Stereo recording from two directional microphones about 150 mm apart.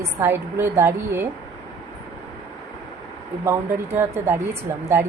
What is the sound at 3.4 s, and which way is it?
A woman's voice, 20° right (ahead or behind).